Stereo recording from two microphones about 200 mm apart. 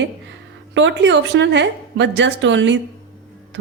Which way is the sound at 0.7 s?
65° right (ahead or behind).